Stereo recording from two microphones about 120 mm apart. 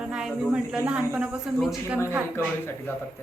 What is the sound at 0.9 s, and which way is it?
A woman's voice, 10° right (ahead or behind).